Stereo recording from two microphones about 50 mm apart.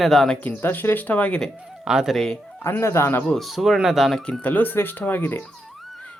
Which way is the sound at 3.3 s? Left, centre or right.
Centre.